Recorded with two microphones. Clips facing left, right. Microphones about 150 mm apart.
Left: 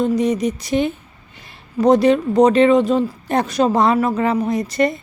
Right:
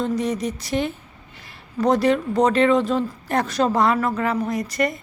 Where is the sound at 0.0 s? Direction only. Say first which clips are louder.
Left 6 dB; 15° left (ahead or behind).